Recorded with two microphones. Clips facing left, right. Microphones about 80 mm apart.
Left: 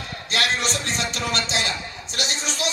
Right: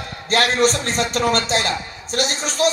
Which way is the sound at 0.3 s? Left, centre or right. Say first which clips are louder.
Right 8 dB; right.